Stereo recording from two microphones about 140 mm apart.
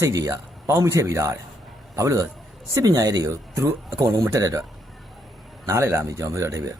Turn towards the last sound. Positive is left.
turn(degrees=-20)  # may be behind; listen again after turning